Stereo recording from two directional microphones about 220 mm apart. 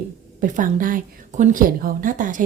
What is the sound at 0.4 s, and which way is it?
Speech, 35° right (ahead or behind).